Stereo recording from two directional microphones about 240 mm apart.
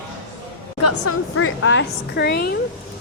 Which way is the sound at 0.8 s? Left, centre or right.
Left.